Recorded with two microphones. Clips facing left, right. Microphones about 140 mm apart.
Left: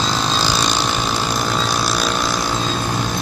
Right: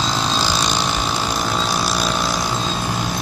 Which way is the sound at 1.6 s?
10° right (ahead or behind).